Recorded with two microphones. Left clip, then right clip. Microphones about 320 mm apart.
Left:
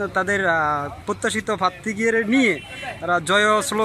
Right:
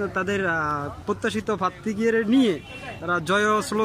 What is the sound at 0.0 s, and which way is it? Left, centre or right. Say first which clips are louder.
Speech: left 4 dB; centre.